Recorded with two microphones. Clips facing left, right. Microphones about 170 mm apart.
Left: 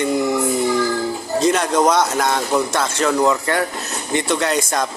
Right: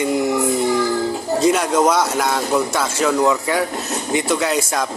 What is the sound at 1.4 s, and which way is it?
Speech, 5° right (ahead or behind).